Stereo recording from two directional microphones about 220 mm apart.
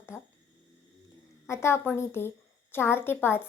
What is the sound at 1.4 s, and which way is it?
A woman's voice, 10° left (ahead or behind).